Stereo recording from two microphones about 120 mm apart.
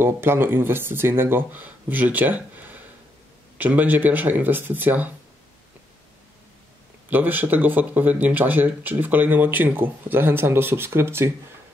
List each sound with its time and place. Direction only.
0.0 s speech: 20° right (ahead or behind)
7.1 s speech: 15° right (ahead or behind)